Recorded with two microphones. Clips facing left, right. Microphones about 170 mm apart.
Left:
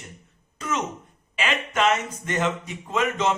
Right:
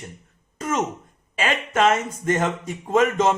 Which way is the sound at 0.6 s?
45° right (ahead or behind).